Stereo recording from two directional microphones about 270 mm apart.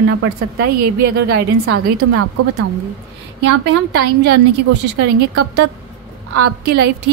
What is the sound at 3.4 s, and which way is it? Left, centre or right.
Speech, right.